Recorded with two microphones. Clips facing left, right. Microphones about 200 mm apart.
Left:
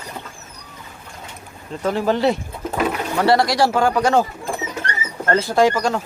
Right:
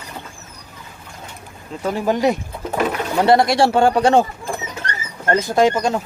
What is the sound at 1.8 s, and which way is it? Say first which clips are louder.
Speech: even; 15° right (ahead or behind).